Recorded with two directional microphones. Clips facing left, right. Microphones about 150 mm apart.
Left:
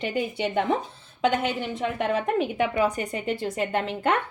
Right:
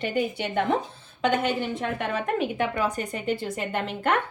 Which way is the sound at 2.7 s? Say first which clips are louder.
Left 3 dB; 15° left (ahead or behind).